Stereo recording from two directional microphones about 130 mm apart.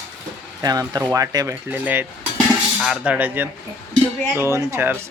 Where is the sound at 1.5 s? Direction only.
15° right (ahead or behind).